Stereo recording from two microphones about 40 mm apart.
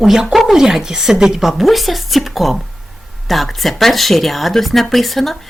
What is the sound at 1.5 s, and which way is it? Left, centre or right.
Speech, centre.